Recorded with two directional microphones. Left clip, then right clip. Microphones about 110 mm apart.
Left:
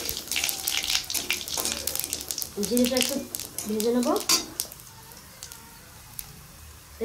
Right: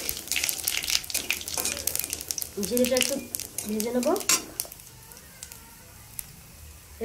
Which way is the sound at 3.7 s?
50° left (ahead or behind).